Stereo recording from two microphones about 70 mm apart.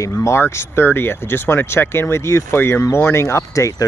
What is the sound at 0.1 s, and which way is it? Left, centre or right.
Speech, left.